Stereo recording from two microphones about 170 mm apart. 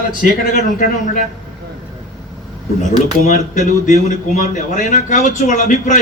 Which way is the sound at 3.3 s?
45° left (ahead or behind).